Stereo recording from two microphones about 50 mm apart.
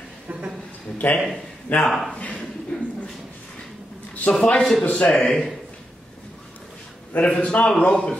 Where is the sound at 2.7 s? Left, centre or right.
Centre.